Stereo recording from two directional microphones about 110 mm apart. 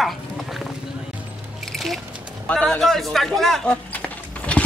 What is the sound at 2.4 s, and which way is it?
Speech, 10° left (ahead or behind).